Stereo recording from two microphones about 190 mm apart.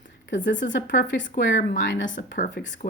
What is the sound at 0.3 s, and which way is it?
Speech, 75° left (ahead or behind).